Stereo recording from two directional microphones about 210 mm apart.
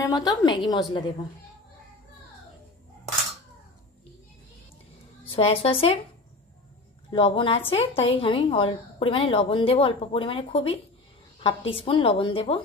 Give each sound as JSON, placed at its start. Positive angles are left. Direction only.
{"t": 0.0, "sound": "a woman's voice", "side_deg": 20}
{"t": 5.2, "sound": "a woman's voice", "side_deg": 25}
{"t": 7.1, "sound": "a woman's voice", "side_deg": 25}